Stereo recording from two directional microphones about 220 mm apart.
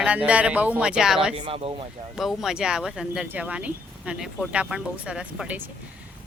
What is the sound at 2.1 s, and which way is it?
Speech, centre (ahead or behind).